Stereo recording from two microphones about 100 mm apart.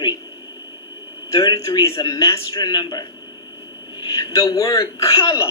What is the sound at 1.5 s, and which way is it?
Speech, 30° left (ahead or behind).